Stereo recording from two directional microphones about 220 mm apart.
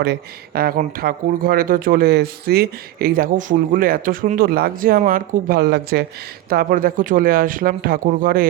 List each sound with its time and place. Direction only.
0.0 s speech: 45° right (ahead or behind)